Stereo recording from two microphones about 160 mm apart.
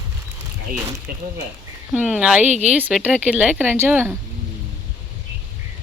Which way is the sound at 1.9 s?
5° right (ahead or behind).